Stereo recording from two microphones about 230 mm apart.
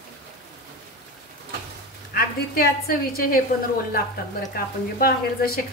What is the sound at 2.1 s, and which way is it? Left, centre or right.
Speech, left.